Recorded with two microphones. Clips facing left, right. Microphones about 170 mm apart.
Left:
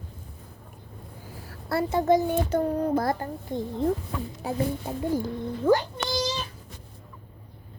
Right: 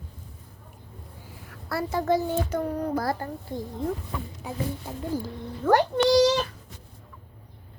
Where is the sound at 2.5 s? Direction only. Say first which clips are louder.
Left 3 dB; 25° left (ahead or behind).